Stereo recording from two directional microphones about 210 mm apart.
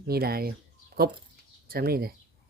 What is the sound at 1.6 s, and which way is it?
Speech, 45° right (ahead or behind).